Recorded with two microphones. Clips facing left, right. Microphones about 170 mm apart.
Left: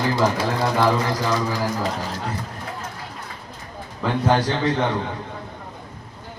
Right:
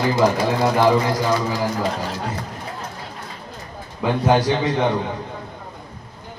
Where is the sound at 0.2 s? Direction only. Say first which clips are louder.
Right 3 dB; 15° right (ahead or behind).